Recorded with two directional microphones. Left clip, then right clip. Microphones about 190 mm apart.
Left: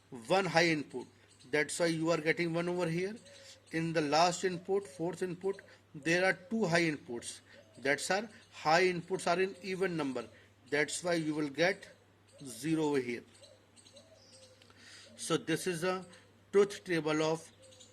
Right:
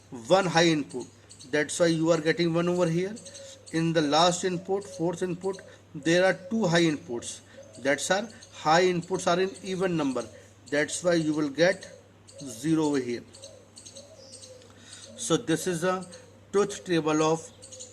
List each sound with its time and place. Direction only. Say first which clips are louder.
0.2 s speech: right 7 dB; 20° left (ahead or behind)
15.1 s speech: right 7 dB; 20° left (ahead or behind)